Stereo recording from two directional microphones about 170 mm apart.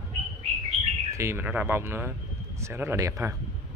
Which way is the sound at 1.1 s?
15° right (ahead or behind).